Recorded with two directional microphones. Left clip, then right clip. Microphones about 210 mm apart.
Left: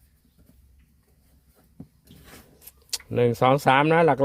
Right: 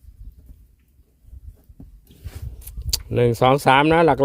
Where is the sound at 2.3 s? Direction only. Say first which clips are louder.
Right 3 dB; 25° right (ahead or behind).